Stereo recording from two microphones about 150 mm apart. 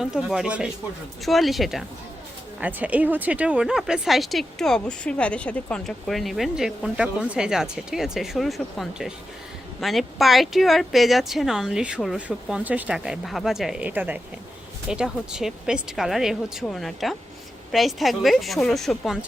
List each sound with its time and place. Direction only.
0.0 s speech: 5° right (ahead or behind)